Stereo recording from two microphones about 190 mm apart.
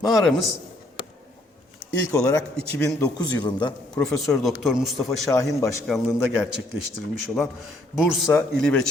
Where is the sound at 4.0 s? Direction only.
5° left (ahead or behind).